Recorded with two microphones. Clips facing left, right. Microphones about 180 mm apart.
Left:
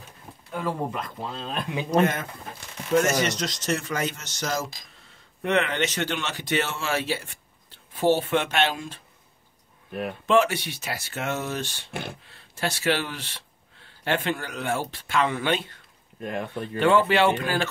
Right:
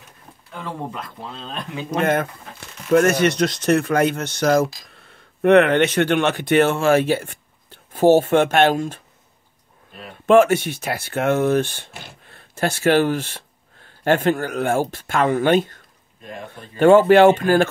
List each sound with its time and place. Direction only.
0.5 s speech: 5° left (ahead or behind)
1.9 s speech: 55° right (ahead or behind)
10.2 s speech: 50° right (ahead or behind)
16.2 s speech: 60° left (ahead or behind)
16.7 s speech: 45° right (ahead or behind)